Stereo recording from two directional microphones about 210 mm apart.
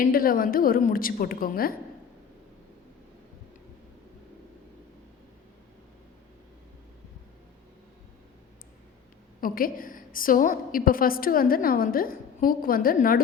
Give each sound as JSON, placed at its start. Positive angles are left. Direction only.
{"t": 0.0, "sound": "a woman's voice", "side_deg": 45}
{"t": 9.4, "sound": "a woman's voice", "side_deg": 40}